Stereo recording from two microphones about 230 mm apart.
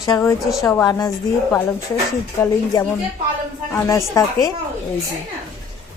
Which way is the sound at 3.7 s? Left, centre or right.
Centre.